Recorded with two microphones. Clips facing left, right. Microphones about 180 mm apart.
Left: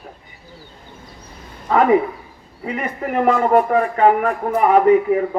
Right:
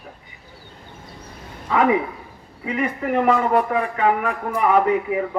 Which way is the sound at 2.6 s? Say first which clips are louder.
Right 1 dB; 45° left (ahead or behind).